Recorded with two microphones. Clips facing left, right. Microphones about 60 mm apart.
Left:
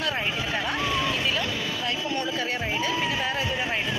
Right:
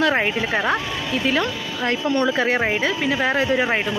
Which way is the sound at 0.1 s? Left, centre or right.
Right.